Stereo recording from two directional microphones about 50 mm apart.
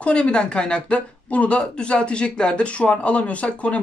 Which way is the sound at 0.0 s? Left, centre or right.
Left.